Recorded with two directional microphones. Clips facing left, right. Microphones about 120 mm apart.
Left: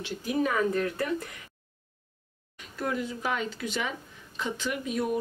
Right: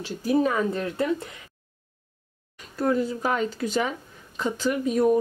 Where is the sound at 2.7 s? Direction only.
35° right (ahead or behind).